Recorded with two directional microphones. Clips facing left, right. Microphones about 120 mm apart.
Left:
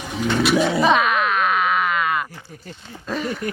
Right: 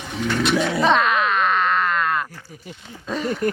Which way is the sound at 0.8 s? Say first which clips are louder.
Left 1 dB; 5° left (ahead or behind).